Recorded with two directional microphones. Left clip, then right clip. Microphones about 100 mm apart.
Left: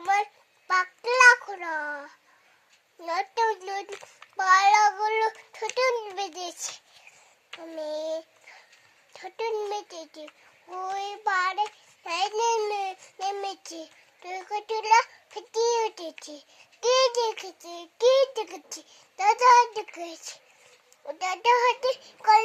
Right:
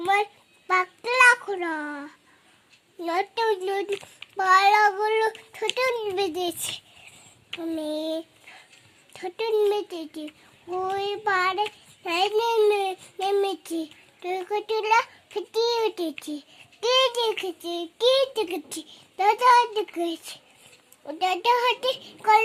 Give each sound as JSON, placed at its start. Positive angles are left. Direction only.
{"t": 0.0, "sound": "child singing", "side_deg": -30}
{"t": 3.0, "sound": "a child's voice", "side_deg": -30}
{"t": 4.4, "sound": "child singing", "side_deg": -35}
{"t": 5.0, "sound": "a child's voice", "side_deg": -30}
{"t": 5.7, "sound": "child singing", "side_deg": -30}
{"t": 7.6, "sound": "child singing", "side_deg": -40}
{"t": 21.1, "sound": "a child's voice", "side_deg": -25}